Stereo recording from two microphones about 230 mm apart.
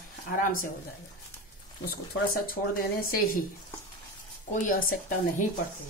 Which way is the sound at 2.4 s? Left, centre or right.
Left.